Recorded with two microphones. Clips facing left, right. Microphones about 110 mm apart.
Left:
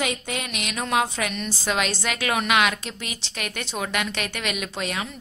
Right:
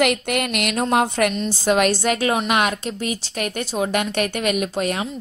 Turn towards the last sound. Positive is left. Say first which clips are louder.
# right 8 dB
turn(degrees=-45)  # may be behind; listen again after turning